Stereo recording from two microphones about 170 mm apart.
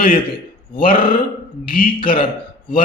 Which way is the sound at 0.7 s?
60° left (ahead or behind).